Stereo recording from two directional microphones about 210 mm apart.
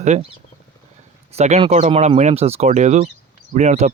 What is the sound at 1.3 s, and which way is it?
Speech, 30° right (ahead or behind).